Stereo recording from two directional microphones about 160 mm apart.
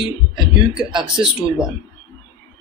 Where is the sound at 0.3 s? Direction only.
5° right (ahead or behind).